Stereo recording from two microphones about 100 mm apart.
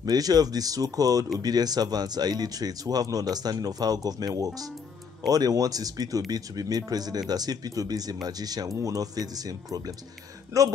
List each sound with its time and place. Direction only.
0.0 s speech: 40° right (ahead or behind)